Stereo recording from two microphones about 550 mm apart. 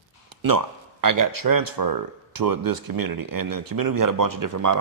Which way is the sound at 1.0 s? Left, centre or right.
Right.